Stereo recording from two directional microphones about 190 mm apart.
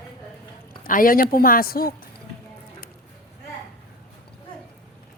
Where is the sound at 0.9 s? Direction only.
45° left (ahead or behind).